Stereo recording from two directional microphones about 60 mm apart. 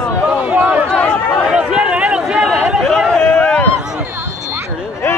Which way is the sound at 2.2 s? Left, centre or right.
Centre.